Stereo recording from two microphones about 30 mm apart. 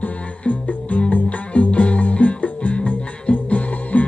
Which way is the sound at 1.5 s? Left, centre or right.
Left.